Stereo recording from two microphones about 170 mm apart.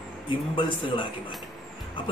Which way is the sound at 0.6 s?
30° left (ahead or behind).